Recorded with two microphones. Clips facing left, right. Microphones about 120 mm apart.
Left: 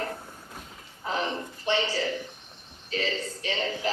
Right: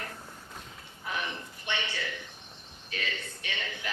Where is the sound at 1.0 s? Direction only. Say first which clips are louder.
Left 6 dB; 30° left (ahead or behind).